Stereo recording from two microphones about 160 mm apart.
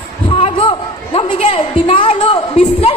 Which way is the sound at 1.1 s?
35° left (ahead or behind).